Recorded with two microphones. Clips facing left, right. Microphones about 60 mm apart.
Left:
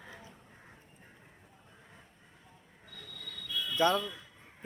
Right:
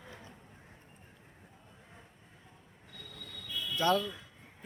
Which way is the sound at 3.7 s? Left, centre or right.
Left.